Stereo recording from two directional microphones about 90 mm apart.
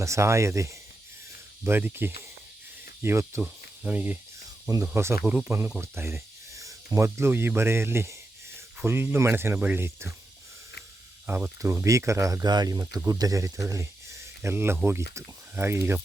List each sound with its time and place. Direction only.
0.0 s speech: 35° right (ahead or behind)
3.4 s speech: 20° right (ahead or behind)
4.9 s speech: 30° right (ahead or behind)
5.2 s speech: 20° right (ahead or behind)
5.5 s speech: 30° right (ahead or behind)
11.3 s speech: 20° right (ahead or behind)
11.6 s speech: 30° right (ahead or behind)